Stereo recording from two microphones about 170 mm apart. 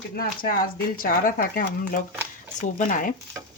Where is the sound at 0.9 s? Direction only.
60° left (ahead or behind).